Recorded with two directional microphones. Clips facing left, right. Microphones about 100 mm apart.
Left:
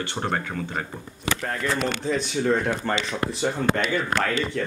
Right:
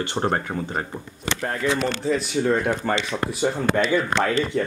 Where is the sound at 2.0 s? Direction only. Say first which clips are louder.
Right 2 dB; centre (ahead or behind).